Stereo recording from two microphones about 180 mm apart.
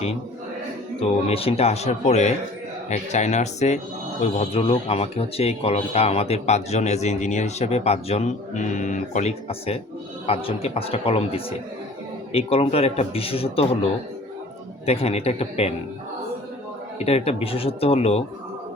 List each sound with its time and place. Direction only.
1.3 s speech: 35° left (ahead or behind)
14.8 s speech: 35° left (ahead or behind)
17.0 s speech: 35° left (ahead or behind)